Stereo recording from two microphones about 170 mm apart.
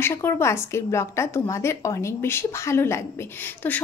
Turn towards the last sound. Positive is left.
turn(degrees=10)  # may be behind; listen again after turning